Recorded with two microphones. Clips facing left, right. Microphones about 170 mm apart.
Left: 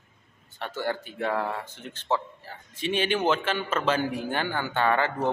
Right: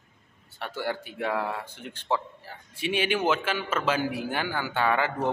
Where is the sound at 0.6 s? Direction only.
10° right (ahead or behind).